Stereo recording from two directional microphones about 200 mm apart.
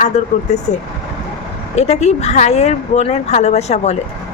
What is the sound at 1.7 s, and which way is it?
Speech, 35° left (ahead or behind).